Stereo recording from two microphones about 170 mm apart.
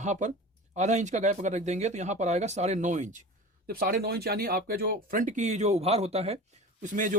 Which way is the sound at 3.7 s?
60° right (ahead or behind).